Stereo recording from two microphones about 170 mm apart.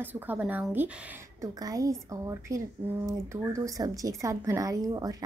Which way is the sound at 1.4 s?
20° right (ahead or behind).